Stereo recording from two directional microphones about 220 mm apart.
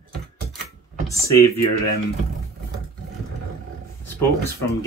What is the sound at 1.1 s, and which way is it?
Speech, 15° left (ahead or behind).